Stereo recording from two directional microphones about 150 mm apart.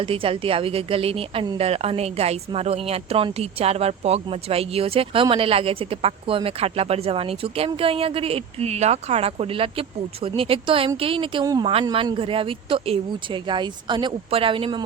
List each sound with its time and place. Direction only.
0.0 s a woman's voice: 35° right (ahead or behind)